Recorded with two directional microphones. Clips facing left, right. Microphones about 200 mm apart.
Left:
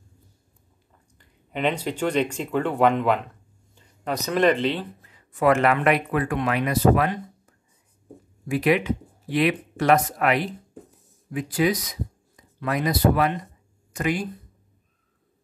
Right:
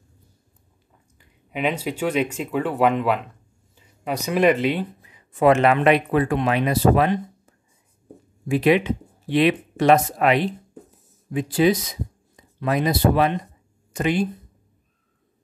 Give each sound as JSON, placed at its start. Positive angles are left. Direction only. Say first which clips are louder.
{"t": 1.1, "sound": "speech", "louder": "right 1 dB", "side_deg": -5}
{"t": 8.5, "sound": "speech", "louder": "right 3 dB", "side_deg": -25}